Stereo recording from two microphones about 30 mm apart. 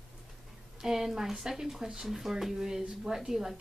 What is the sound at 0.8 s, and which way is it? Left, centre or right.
A woman's voice, centre.